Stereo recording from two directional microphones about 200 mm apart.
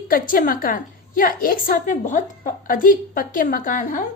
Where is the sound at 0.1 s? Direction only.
45° left (ahead or behind).